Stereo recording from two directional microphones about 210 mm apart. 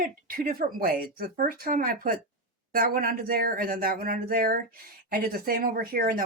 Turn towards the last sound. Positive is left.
turn(degrees=-40)  # may be behind; listen again after turning